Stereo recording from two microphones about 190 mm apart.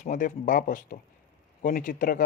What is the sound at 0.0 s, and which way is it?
Speech, 45° left (ahead or behind).